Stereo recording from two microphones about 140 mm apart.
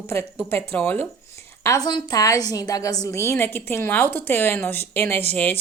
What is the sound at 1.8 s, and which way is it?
A woman's voice, 30° left (ahead or behind).